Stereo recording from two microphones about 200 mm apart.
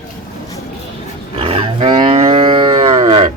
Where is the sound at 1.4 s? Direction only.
30° right (ahead or behind).